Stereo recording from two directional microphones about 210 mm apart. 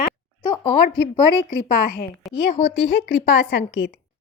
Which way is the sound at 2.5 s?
35° left (ahead or behind).